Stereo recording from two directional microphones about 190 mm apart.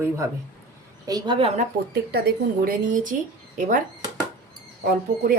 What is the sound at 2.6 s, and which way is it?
Speech, 45° right (ahead or behind).